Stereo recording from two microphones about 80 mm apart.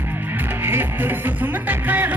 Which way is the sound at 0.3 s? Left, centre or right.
Right.